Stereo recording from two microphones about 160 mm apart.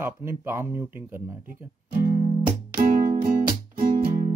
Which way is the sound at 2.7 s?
55° right (ahead or behind).